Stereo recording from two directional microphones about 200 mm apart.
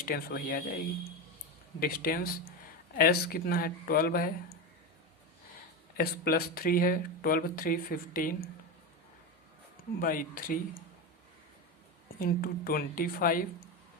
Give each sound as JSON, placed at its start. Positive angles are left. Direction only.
{"t": 0.0, "sound": "speech", "side_deg": 50}
{"t": 1.8, "sound": "speech", "side_deg": 45}
{"t": 6.0, "sound": "speech", "side_deg": 50}
{"t": 10.0, "sound": "speech", "side_deg": 45}
{"t": 12.2, "sound": "speech", "side_deg": 45}